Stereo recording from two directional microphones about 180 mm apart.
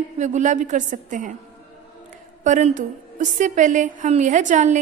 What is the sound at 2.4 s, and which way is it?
A woman's voice, 45° right (ahead or behind).